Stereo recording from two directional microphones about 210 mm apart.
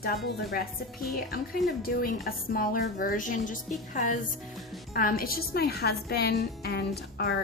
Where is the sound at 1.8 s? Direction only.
45° left (ahead or behind).